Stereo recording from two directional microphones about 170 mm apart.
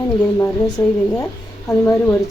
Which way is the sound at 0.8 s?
25° left (ahead or behind).